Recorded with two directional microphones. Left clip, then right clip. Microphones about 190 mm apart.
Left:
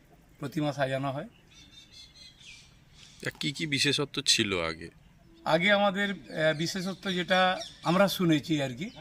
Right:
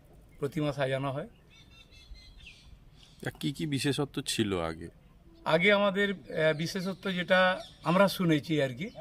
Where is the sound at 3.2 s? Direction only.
45° right (ahead or behind).